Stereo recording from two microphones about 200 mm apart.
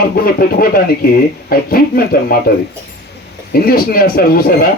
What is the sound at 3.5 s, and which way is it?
Speech, 45° left (ahead or behind).